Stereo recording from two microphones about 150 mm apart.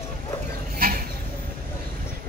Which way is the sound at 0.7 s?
80° right.